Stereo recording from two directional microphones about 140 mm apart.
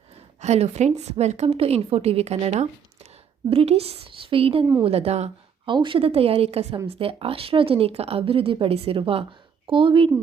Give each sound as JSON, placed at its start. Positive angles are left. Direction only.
{"t": 0.3, "sound": "a woman's voice", "side_deg": -50}
{"t": 5.6, "sound": "a woman's voice", "side_deg": -35}